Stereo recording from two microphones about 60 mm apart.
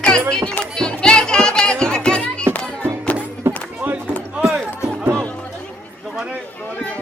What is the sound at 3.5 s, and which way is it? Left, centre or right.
Run, right.